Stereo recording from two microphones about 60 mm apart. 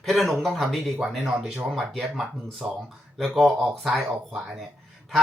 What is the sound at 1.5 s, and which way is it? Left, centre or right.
Speech, centre.